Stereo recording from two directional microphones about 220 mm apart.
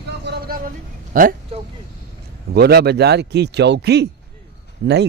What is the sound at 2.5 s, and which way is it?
Speech, 45° right (ahead or behind).